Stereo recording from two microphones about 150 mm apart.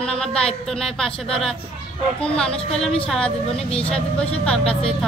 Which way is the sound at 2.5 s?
40° left (ahead or behind).